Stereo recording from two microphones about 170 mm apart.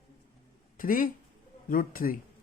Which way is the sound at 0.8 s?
55° left (ahead or behind).